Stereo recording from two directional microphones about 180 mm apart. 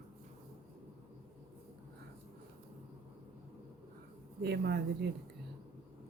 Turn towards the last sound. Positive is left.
turn(degrees=-65)  # may be behind; listen again after turning